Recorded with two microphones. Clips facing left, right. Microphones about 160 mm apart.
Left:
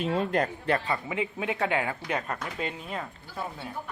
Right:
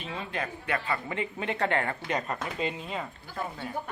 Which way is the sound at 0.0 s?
55° left (ahead or behind).